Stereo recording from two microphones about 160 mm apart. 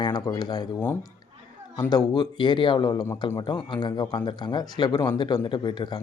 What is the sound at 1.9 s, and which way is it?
Speech, 25° left (ahead or behind).